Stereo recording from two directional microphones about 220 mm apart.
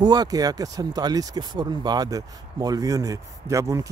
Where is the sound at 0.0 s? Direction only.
20° right (ahead or behind).